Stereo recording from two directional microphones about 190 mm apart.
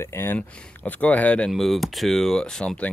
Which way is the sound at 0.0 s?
10° left (ahead or behind).